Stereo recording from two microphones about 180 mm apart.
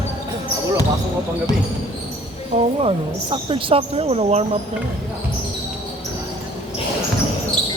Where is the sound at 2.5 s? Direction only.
30° right (ahead or behind).